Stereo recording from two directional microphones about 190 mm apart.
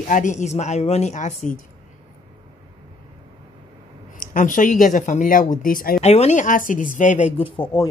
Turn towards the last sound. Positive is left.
turn(degrees=25)  # may be behind; listen again after turning